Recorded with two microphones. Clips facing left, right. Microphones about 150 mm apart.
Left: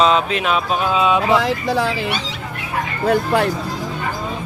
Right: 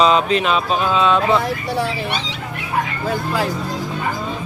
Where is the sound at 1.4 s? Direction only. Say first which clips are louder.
Left 2 dB; 90° left.